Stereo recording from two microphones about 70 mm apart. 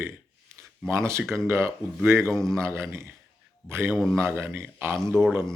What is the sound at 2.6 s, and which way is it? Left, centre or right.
A man's voice, right.